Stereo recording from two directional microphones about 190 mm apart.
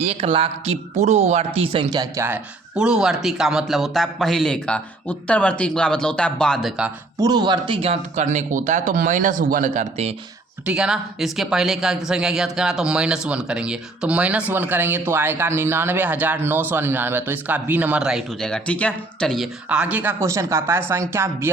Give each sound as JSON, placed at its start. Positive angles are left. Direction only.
{"t": 0.0, "sound": "speech", "side_deg": -30}
{"t": 7.2, "sound": "speech", "side_deg": -20}
{"t": 10.7, "sound": "speech", "side_deg": -5}
{"t": 19.6, "sound": "speech", "side_deg": -5}